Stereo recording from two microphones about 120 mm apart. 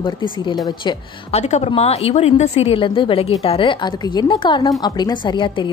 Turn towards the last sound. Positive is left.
turn(degrees=40)  # may be behind; listen again after turning